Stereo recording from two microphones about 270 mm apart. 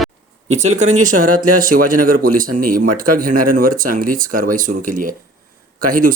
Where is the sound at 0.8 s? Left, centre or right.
Right.